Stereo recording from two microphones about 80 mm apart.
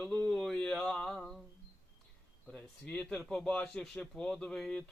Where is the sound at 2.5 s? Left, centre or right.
Centre.